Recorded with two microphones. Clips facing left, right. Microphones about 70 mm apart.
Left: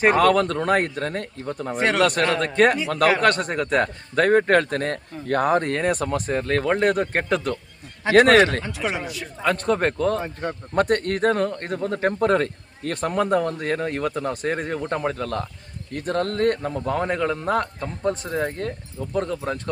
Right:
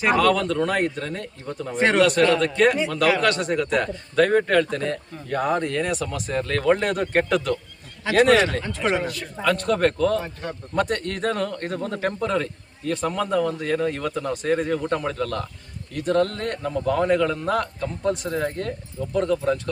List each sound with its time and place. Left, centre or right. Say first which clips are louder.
0.0 s a man's voice: left 2 dB; left
2.2 s a man's voice: even; left
6.3 s a man's voice: right 3 dB; left
8.1 s speech: left 3 dB; left
8.6 s speech: right 3 dB; centre
9.4 s speech: right 1 dB; left
12.2 s a man's voice: left 4 dB; left
16.0 s a man's voice: right 1 dB; left